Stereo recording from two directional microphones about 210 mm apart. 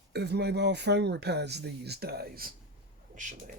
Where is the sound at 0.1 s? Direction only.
50° right (ahead or behind); by 3.5 s 35° right (ahead or behind).